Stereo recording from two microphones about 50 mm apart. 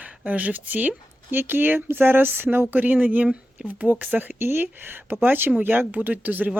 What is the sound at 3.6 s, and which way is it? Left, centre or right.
Speech, right.